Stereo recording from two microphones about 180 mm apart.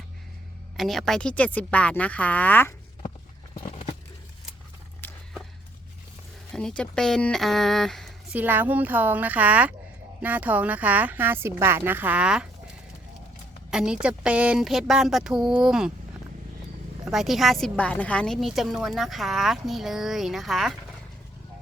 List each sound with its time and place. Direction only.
0.8 s speech: centre (ahead or behind)
3.7 s a sound: 40° left (ahead or behind)
6.5 s speech: 5° left (ahead or behind)
8.4 s a woman's voice: 10° right (ahead or behind)
13.7 s a woman's voice: 5° right (ahead or behind)
17.1 s a woman's voice: centre (ahead or behind)